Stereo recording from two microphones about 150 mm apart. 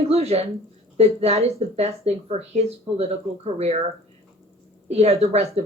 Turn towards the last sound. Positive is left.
turn(degrees=-45)  # may be behind; listen again after turning